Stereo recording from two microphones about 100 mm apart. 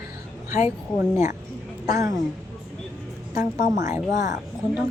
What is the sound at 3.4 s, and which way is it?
Speech, 35° right (ahead or behind).